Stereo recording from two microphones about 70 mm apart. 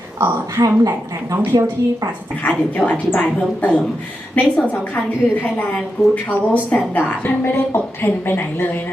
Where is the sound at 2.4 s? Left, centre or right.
Left.